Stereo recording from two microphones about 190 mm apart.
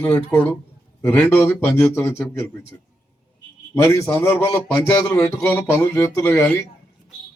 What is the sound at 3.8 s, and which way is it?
A man's voice, 10° left (ahead or behind).